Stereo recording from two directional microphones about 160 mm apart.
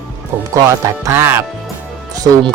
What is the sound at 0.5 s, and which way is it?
Speech, 20° right (ahead or behind).